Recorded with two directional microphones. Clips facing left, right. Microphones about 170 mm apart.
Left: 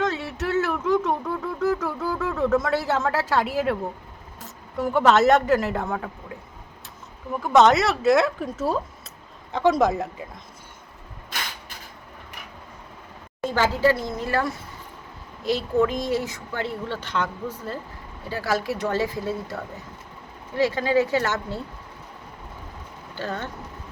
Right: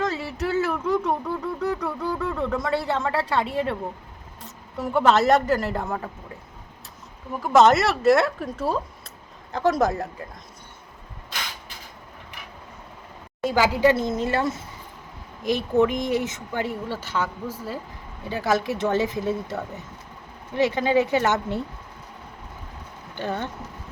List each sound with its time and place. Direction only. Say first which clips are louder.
0.0 s a sound: even; centre (ahead or behind)
4.4 s speech: left 4 dB; centre (ahead or behind)
7.3 s speech: even; centre (ahead or behind)
13.4 s speech: right 2 dB; 10° right (ahead or behind)
18.3 s speech: right 2 dB; 20° right (ahead or behind)
20.6 s speech: even; 20° right (ahead or behind)
23.1 s speech: right 2 dB; 15° right (ahead or behind)